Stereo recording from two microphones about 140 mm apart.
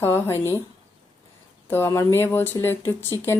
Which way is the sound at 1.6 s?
15° left (ahead or behind).